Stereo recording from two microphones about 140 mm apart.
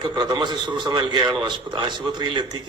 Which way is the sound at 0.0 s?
30° right (ahead or behind).